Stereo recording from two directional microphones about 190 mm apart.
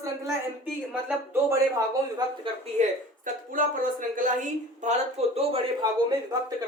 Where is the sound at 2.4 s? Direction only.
35° right (ahead or behind).